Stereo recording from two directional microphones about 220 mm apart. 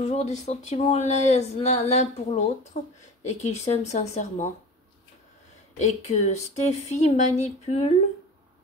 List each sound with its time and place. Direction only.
0.0 s speech: 30° left (ahead or behind)
5.8 s speech: 35° left (ahead or behind)